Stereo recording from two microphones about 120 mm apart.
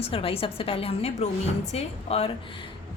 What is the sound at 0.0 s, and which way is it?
A woman's voice, 50° left (ahead or behind).